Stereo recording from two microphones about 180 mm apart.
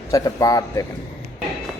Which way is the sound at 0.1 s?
20° left (ahead or behind).